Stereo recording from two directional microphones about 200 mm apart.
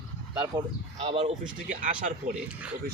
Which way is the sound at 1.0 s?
30° right (ahead or behind).